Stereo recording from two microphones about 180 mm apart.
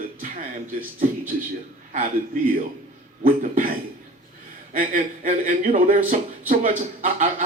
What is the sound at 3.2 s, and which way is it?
Speech, 50° right (ahead or behind).